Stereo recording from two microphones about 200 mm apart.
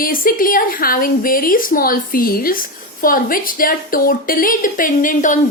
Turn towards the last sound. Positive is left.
turn(degrees=40)  # may be behind; listen again after turning